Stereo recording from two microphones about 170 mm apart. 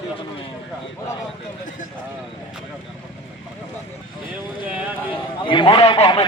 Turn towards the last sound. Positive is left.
turn(degrees=30)  # may be behind; listen again after turning